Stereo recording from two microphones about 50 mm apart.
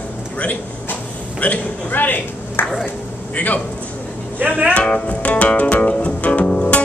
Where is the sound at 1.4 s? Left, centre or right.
Left.